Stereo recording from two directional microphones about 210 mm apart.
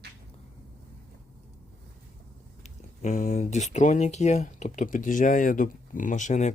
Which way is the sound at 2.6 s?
35° left (ahead or behind).